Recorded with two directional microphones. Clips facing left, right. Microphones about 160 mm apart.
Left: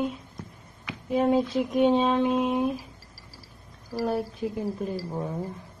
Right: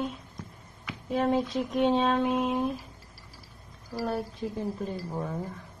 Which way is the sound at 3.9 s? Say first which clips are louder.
Left 4 dB; centre (ahead or behind).